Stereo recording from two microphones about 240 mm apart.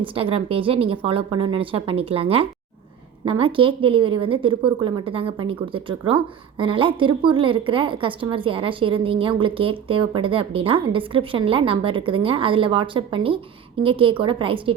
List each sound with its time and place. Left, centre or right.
0.0 s a woman's voice: right